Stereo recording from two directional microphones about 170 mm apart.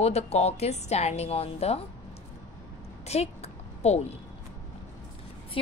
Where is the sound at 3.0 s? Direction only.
40° left (ahead or behind).